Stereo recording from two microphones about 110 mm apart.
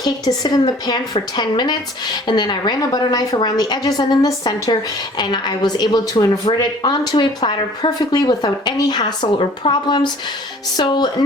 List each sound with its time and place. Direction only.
0.0 s speech: 35° left (ahead or behind)
10.8 s music: 45° left (ahead or behind)